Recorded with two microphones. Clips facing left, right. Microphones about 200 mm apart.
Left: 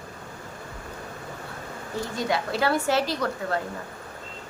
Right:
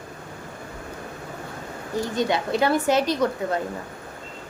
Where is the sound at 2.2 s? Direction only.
20° right (ahead or behind).